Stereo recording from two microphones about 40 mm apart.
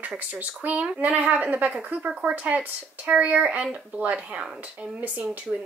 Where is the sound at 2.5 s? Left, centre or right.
Right.